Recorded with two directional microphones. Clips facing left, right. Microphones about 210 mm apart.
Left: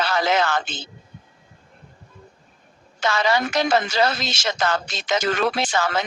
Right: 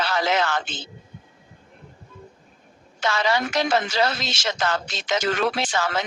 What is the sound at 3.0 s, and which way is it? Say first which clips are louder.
Speech: left 2 dB; 45° left (ahead or behind).